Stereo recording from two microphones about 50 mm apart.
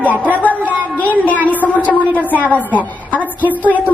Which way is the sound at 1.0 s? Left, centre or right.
Left.